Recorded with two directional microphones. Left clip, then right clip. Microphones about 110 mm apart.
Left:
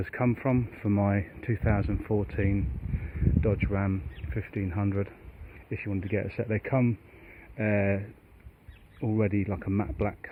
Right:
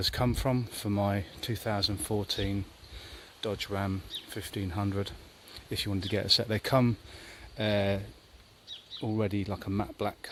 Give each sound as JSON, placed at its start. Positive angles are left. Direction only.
{"t": 0.0, "sound": "speech", "side_deg": -15}
{"t": 5.7, "sound": "speech", "side_deg": -35}
{"t": 7.6, "sound": "speech", "side_deg": -25}